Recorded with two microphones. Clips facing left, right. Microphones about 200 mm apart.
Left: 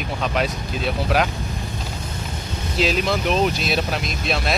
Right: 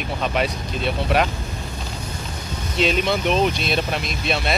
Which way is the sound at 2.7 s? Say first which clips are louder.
Right 1 dB; centre (ahead or behind).